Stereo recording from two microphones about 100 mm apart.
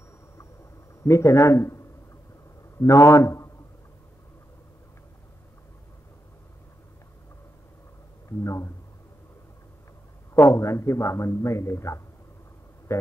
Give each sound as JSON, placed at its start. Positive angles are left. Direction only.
{"t": 1.0, "sound": "a man's voice", "side_deg": 30}
{"t": 2.8, "sound": "speech", "side_deg": 30}
{"t": 8.3, "sound": "speech", "side_deg": 30}
{"t": 10.3, "sound": "a man's voice", "side_deg": 30}